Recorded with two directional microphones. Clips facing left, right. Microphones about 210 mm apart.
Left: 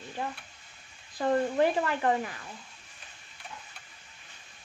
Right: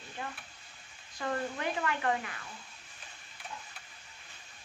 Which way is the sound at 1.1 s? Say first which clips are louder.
Left 9 dB; 35° left (ahead or behind).